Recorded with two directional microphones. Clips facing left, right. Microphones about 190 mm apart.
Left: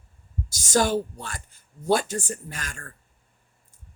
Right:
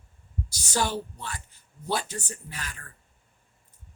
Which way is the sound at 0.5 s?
45° left (ahead or behind).